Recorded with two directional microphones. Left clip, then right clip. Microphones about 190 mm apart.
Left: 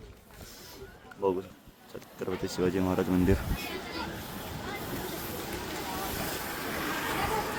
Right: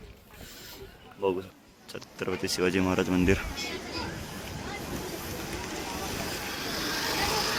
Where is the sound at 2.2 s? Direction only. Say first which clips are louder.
Right 2 dB; 5° left (ahead or behind).